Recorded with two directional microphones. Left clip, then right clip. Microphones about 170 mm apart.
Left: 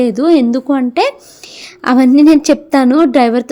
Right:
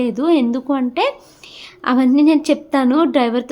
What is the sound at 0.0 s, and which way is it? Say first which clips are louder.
A woman's voice: left 6 dB; 30° left (ahead or behind).